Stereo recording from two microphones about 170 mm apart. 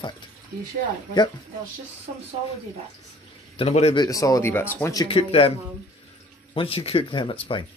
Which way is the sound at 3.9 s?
20° left (ahead or behind).